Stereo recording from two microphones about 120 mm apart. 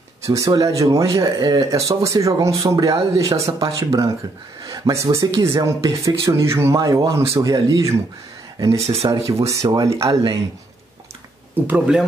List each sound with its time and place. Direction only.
0.3 s speech: 30° right (ahead or behind)
8.7 s speech: 60° right (ahead or behind)
9.6 s speech: 30° right (ahead or behind)
11.5 s speech: 15° right (ahead or behind)